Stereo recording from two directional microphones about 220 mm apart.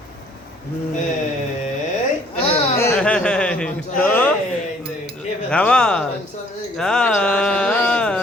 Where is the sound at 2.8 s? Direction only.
10° left (ahead or behind).